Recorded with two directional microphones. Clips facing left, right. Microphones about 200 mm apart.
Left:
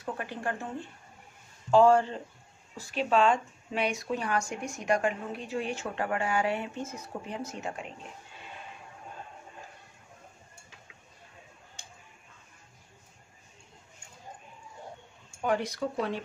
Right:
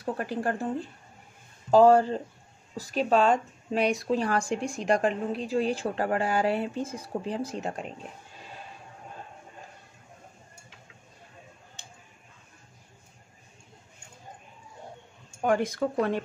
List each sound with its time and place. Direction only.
0.0 s speech: 35° right (ahead or behind)
15.4 s speech: 50° right (ahead or behind)